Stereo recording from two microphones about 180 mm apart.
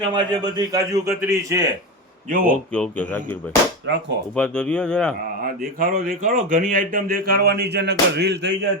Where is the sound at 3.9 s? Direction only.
70° right (ahead or behind).